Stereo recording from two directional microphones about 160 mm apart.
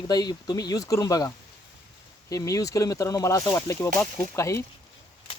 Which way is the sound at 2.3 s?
20° left (ahead or behind).